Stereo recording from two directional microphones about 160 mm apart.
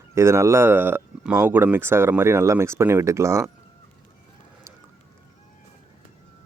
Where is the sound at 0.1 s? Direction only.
20° right (ahead or behind).